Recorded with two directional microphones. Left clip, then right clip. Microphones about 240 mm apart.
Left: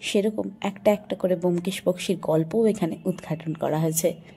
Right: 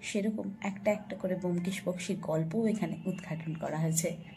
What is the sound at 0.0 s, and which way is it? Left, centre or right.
Speech, left.